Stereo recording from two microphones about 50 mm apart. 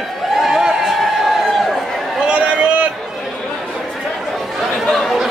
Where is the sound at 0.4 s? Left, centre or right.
Centre.